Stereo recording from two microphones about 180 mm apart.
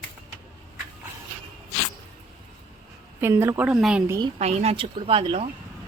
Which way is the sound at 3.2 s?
15° right (ahead or behind).